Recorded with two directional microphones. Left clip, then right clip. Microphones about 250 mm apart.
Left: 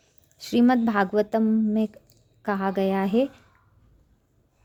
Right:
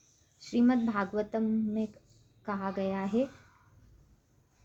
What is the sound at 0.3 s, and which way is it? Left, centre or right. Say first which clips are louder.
A woman's voice: left 7 dB; left.